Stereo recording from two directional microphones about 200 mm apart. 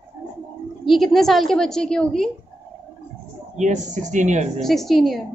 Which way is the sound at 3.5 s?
35° right (ahead or behind).